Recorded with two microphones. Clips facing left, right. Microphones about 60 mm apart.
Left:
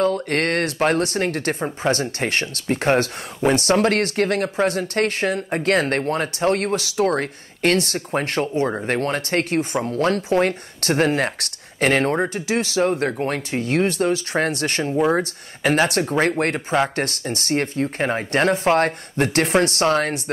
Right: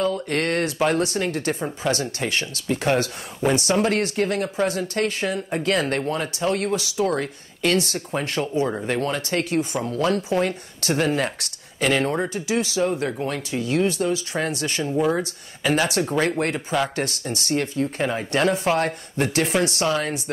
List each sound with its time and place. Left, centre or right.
0.0 s speech: left
12.4 s speech: left
15.0 s speech: left